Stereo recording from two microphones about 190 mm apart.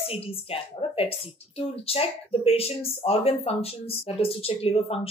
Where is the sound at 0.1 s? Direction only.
30° left (ahead or behind).